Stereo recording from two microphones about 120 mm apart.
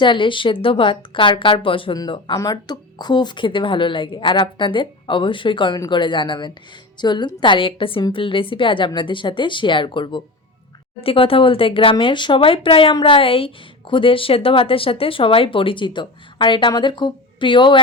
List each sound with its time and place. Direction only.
0.0 s a woman's voice: 45° left (ahead or behind)